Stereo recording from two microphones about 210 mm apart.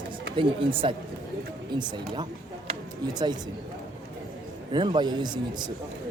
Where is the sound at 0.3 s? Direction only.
25° right (ahead or behind).